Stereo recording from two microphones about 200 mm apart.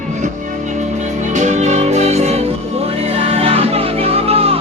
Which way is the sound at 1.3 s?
35° right (ahead or behind).